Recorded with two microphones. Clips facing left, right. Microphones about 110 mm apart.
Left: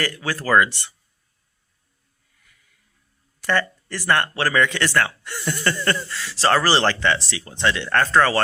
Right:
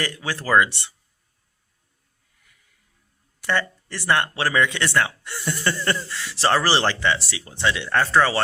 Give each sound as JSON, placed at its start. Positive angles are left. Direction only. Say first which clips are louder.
{"t": 0.0, "sound": "speech", "louder": "left 2 dB", "side_deg": -20}
{"t": 3.4, "sound": "speech", "louder": "left 2 dB", "side_deg": -15}